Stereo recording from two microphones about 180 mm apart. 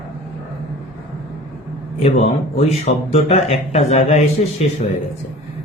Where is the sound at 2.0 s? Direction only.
40° left (ahead or behind).